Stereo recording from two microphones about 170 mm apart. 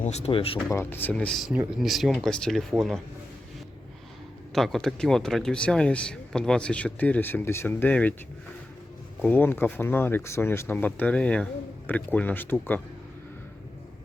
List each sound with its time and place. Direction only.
0.0 s speech: 40° left (ahead or behind)
0.7 s speech: 15° left (ahead or behind)
4.5 s speech: centre (ahead or behind)
9.2 s speech: 10° left (ahead or behind)